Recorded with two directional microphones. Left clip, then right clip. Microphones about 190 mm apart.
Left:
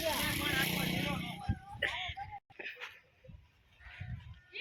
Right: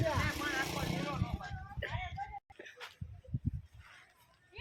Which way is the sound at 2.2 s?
15° left (ahead or behind).